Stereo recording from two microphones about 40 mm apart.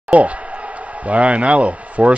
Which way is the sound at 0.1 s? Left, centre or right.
Right.